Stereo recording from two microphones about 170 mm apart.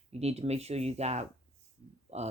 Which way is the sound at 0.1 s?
40° right (ahead or behind).